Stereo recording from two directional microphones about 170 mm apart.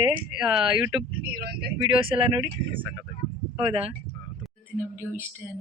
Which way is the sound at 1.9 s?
30° right (ahead or behind).